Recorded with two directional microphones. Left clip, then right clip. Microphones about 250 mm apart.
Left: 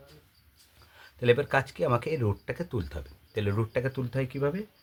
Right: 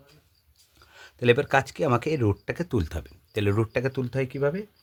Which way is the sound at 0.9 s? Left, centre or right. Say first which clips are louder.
Right 3 dB; right.